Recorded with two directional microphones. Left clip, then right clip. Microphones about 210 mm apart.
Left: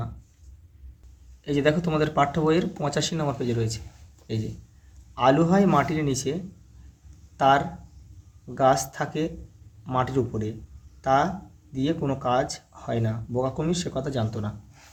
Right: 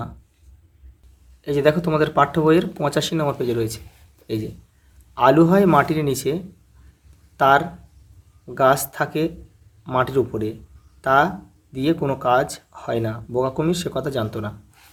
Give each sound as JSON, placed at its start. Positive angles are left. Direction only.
{"t": 1.5, "sound": "speech", "side_deg": -25}
{"t": 5.1, "sound": "speech", "side_deg": -25}